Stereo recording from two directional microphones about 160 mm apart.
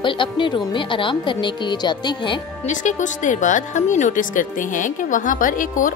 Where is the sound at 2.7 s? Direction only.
50° left (ahead or behind).